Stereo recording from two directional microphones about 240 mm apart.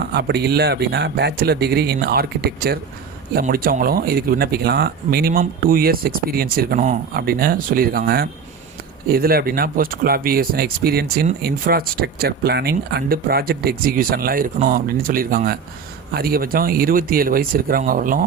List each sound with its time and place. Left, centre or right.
0.1 s speech: right